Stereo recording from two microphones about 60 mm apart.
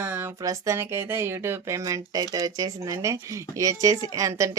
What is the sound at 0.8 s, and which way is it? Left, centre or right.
Speech, right.